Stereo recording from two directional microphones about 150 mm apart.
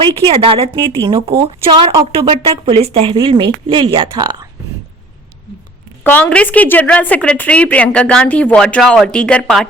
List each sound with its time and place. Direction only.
0.0 s a woman's voice: 35° right (ahead or behind)
6.0 s a woman's voice: 10° left (ahead or behind)